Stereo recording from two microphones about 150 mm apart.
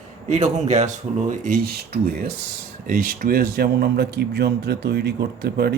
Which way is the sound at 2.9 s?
70° right (ahead or behind).